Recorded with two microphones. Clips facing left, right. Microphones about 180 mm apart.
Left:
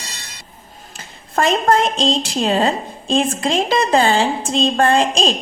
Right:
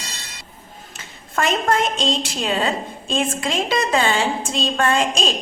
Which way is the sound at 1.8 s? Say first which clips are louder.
Left 3 dB; centre (ahead or behind).